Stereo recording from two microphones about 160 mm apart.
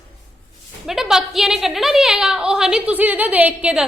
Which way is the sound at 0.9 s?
5° right (ahead or behind).